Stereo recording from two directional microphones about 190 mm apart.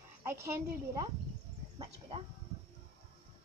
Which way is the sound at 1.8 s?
30° right (ahead or behind).